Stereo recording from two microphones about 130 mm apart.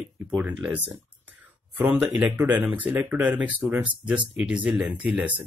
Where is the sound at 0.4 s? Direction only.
15° right (ahead or behind).